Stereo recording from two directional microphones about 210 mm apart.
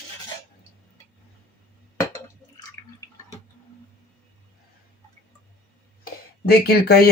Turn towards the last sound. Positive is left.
turn(degrees=50)  # may be behind; listen again after turning